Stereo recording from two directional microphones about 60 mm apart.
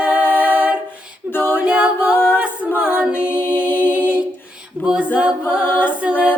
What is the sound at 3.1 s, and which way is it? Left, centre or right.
Music, left.